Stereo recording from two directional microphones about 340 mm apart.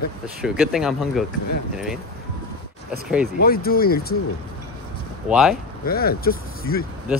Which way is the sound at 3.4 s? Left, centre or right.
Left.